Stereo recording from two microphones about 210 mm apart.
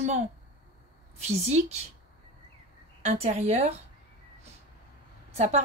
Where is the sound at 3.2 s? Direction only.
30° right (ahead or behind).